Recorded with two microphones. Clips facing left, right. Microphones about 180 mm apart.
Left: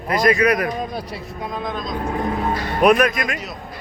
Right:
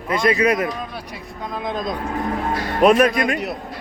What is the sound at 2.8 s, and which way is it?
Speech, 30° right (ahead or behind).